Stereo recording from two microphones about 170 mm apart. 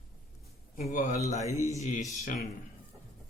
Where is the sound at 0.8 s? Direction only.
50° left (ahead or behind).